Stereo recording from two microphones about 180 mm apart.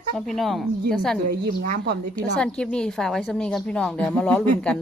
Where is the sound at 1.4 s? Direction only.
60° right (ahead or behind).